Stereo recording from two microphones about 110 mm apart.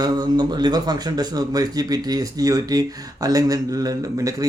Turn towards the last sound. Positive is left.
turn(degrees=-30)  # may be behind; listen again after turning